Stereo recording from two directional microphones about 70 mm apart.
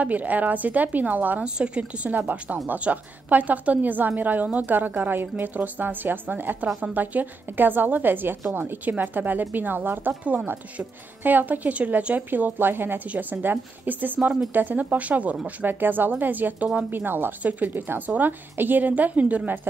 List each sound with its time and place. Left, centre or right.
0.0 s speech: right